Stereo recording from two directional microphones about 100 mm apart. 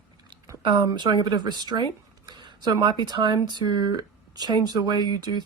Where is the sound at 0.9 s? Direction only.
50° right (ahead or behind).